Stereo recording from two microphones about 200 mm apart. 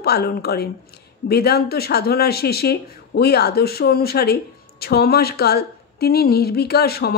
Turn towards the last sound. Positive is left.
turn(degrees=50)  # may be behind; listen again after turning